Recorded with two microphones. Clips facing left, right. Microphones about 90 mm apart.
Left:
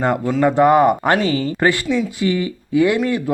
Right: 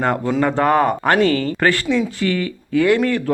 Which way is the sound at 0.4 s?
15° left (ahead or behind).